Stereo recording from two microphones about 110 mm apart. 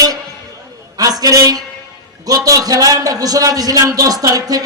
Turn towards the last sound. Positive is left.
turn(degrees=-35)  # may be behind; listen again after turning